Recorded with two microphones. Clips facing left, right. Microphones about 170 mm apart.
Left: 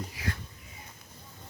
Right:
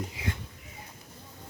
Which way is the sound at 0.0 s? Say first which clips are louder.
Right 1 dB; 20° right (ahead or behind).